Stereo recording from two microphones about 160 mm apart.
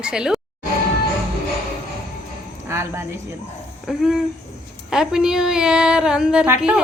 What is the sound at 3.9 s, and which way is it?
A woman's voice, 5° right (ahead or behind).